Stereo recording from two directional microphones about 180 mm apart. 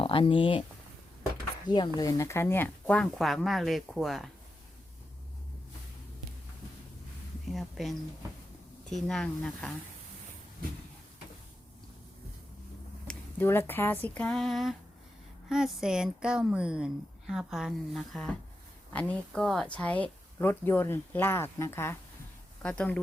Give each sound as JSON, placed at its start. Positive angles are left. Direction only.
{"t": 0.0, "sound": "speech", "side_deg": 30}
{"t": 1.6, "sound": "a woman's voice", "side_deg": 25}
{"t": 7.5, "sound": "a woman's voice", "side_deg": 0}
{"t": 9.0, "sound": "a woman's voice", "side_deg": 5}
{"t": 13.1, "sound": "a woman's voice", "side_deg": 10}